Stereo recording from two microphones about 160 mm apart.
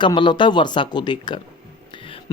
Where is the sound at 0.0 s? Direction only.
30° left (ahead or behind).